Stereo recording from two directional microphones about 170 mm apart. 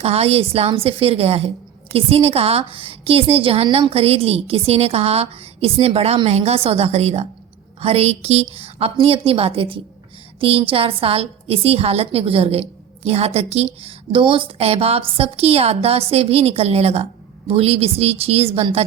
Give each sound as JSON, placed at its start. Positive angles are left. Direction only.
{"t": 0.0, "sound": "a woman's voice", "side_deg": -35}